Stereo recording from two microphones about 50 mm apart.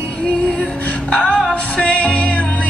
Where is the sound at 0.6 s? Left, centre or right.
Left.